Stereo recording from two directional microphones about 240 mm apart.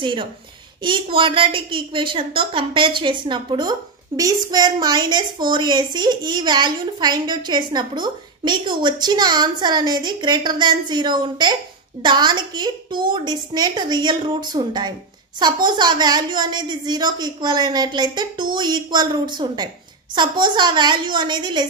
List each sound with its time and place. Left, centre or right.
0.0 s a woman's voice: centre